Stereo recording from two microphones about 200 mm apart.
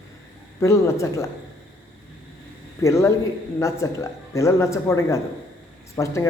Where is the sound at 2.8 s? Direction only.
15° left (ahead or behind).